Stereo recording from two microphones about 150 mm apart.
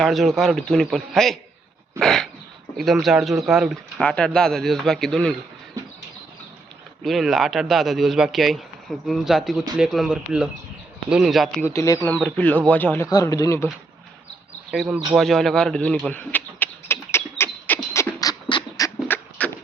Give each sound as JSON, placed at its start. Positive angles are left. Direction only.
{"t": 0.0, "sound": "a man's voice", "side_deg": 0}
{"t": 7.0, "sound": "a man's voice", "side_deg": 0}
{"t": 11.6, "sound": "speech", "side_deg": 20}
{"t": 13.1, "sound": "speech", "side_deg": 25}
{"t": 14.7, "sound": "a man's voice", "side_deg": -5}
{"t": 16.0, "sound": "a sound", "side_deg": 10}
{"t": 17.9, "sound": "beatboxing", "side_deg": 20}
{"t": 19.0, "sound": "beatboxing", "side_deg": 15}